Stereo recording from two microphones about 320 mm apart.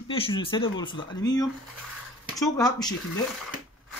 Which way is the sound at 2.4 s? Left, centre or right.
Centre.